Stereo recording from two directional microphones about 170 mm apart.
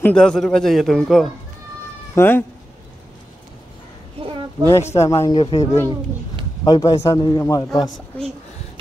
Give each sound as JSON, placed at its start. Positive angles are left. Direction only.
{"t": 0.0, "sound": "a man's voice", "side_deg": 5}
{"t": 2.1, "sound": "speech", "side_deg": 10}
{"t": 4.2, "sound": "a sound", "side_deg": -30}
{"t": 4.6, "sound": "speech", "side_deg": 15}
{"t": 5.3, "sound": "speech", "side_deg": 35}
{"t": 6.6, "sound": "a man's voice", "side_deg": 20}